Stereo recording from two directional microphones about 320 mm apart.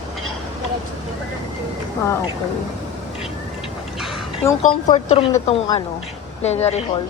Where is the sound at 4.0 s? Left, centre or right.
Centre.